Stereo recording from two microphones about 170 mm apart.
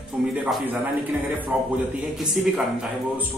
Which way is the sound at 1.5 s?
10° right (ahead or behind).